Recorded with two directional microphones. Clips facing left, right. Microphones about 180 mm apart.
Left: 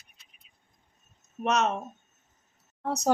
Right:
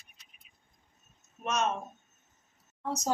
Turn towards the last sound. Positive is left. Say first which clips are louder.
# left 6 dB
turn(degrees=65)  # may be behind; listen again after turning